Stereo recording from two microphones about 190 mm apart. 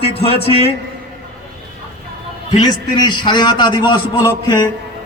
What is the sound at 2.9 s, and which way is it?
A man's voice, 20° left (ahead or behind).